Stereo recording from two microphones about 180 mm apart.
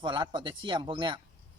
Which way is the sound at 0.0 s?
25° right (ahead or behind).